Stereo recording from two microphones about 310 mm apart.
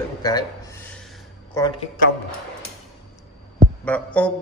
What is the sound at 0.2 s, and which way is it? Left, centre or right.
A man's voice, centre.